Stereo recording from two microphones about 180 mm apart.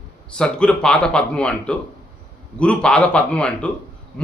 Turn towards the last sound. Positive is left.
turn(degrees=5)  # may be behind; listen again after turning